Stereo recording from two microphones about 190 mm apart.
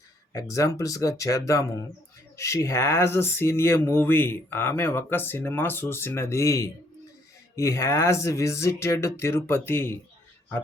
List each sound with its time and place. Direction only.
0.3 s speech: 15° left (ahead or behind)